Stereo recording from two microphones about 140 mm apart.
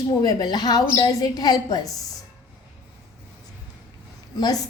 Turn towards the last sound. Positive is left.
turn(degrees=25)  # may be behind; listen again after turning